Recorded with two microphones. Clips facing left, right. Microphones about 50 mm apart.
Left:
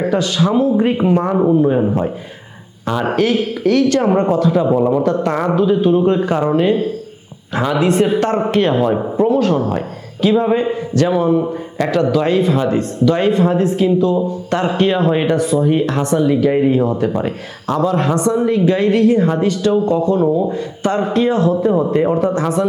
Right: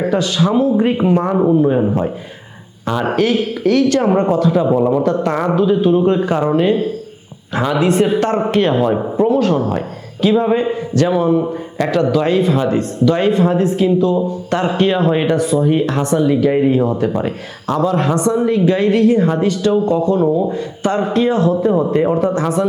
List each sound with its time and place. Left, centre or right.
0.0 s a man's voice: right